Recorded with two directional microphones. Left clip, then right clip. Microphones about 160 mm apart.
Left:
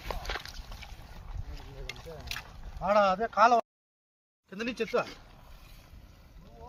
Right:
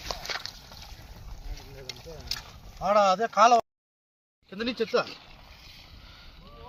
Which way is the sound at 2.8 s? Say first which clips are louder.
Right 3 dB; 45° right (ahead or behind).